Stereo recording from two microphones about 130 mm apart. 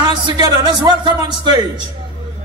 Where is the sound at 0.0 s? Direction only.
35° right (ahead or behind).